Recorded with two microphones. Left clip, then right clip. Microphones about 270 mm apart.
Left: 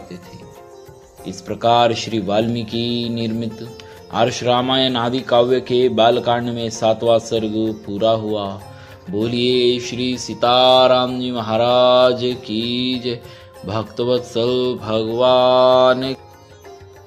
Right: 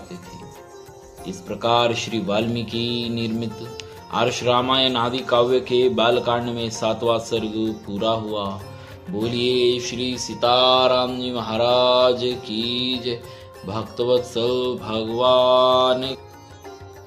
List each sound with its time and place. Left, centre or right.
1.3 s music: centre
7.4 s speech: centre
7.9 s music: centre